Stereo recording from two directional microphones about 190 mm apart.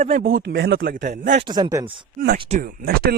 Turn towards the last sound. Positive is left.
turn(degrees=-55)  # may be behind; listen again after turning